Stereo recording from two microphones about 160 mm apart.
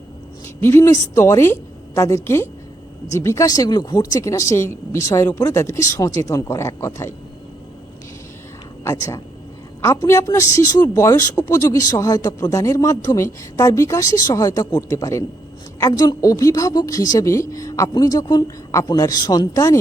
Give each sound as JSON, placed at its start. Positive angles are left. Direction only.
{"t": 0.6, "sound": "a woman's voice", "side_deg": 15}
{"t": 8.8, "sound": "speech", "side_deg": 20}